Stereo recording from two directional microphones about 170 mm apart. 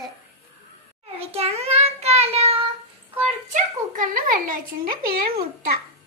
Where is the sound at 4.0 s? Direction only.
55° right (ahead or behind).